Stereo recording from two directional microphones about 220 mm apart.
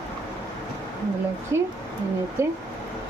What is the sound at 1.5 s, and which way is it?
A woman's voice, 15° right (ahead or behind).